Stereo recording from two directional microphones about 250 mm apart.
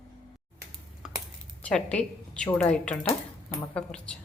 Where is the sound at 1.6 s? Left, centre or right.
Centre.